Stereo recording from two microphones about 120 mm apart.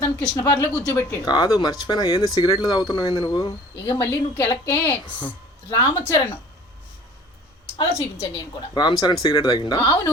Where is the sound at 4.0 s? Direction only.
25° left (ahead or behind).